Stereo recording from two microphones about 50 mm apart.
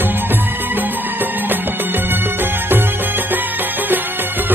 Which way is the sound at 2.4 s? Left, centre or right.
Right.